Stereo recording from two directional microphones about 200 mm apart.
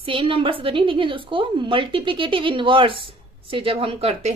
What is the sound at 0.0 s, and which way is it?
Speech, 25° right (ahead or behind).